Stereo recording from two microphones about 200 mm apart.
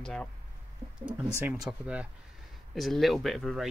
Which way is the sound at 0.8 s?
30° right (ahead or behind).